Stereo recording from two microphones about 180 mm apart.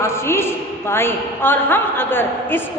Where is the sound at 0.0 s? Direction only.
15° left (ahead or behind).